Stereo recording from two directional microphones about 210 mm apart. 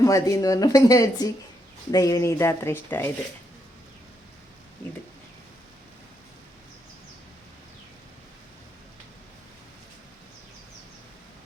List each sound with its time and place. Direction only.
0.0 s speech: 15° left (ahead or behind)